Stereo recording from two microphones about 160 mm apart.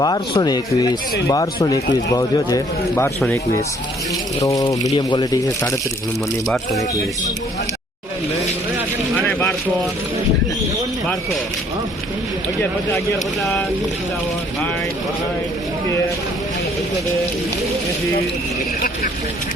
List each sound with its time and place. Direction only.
0.0 s speech: 25° left (ahead or behind)
4.4 s speech: 20° left (ahead or behind)
9.1 s vehicle: 10° left (ahead or behind)
13.4 s speech: 5° left (ahead or behind)